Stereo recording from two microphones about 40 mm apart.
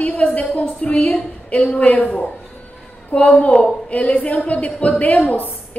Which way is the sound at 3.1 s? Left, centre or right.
Left.